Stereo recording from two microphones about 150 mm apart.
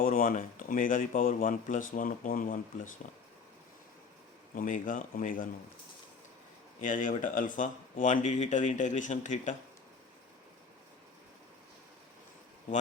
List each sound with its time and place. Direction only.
0.0 s speech: 65° left (ahead or behind)
4.5 s speech: 60° left (ahead or behind)
6.8 s speech: 60° left (ahead or behind)